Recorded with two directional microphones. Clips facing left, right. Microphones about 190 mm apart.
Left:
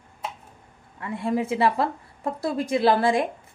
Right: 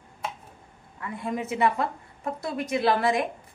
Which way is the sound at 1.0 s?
25° left (ahead or behind).